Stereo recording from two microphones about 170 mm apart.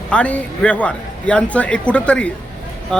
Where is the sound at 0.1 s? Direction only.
5° left (ahead or behind).